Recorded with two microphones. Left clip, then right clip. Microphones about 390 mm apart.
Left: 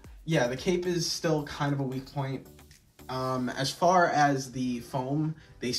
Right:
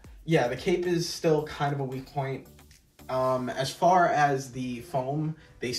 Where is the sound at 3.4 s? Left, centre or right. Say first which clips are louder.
Right 2 dB; centre.